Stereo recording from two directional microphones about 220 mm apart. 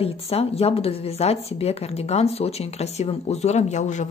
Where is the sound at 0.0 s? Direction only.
25° left (ahead or behind).